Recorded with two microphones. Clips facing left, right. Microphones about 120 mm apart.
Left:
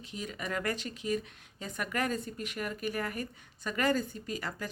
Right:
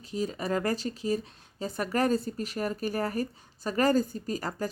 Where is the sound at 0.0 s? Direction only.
35° right (ahead or behind).